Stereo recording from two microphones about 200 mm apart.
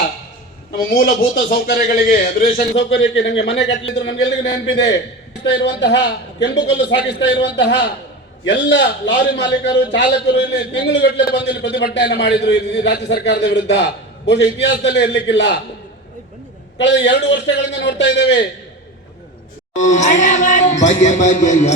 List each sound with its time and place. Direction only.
0.8 s a man's voice: 45° left (ahead or behind); by 15.5 s 60° left (ahead or behind)
16.7 s a man's voice: 65° left (ahead or behind)
19.7 s speech: 35° left (ahead or behind)